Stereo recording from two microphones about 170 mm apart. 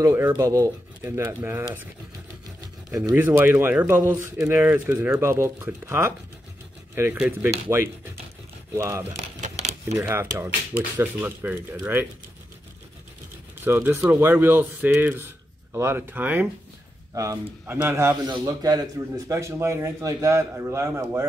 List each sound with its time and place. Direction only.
0.0 s speech: 15° right (ahead or behind)
3.1 s speech: 15° right (ahead or behind)
13.7 s speech: 15° right (ahead or behind)